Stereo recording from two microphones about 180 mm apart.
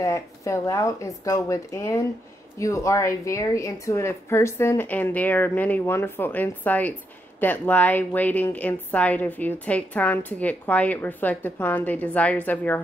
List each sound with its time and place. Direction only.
0.0 s a woman's voice: 15° left (ahead or behind)